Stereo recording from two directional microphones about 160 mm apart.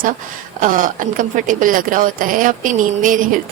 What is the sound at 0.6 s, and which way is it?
Speech, 55° right (ahead or behind).